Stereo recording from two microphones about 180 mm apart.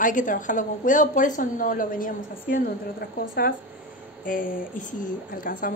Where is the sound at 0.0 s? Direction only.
45° left (ahead or behind).